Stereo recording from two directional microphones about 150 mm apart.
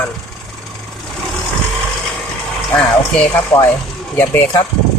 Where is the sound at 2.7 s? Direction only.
5° left (ahead or behind).